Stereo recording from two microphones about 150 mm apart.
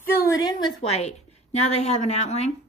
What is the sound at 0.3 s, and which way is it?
Speech, 25° left (ahead or behind).